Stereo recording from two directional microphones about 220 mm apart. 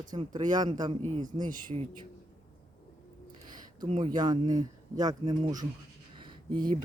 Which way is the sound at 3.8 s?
20° right (ahead or behind).